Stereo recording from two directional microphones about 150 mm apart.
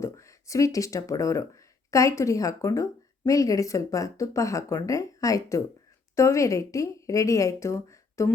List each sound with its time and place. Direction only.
0.0 s speech: 20° left (ahead or behind)